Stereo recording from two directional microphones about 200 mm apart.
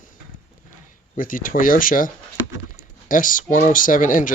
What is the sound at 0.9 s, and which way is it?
Speech, 45° left (ahead or behind).